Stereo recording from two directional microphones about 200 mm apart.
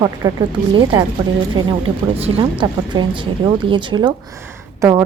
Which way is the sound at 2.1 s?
30° right (ahead or behind).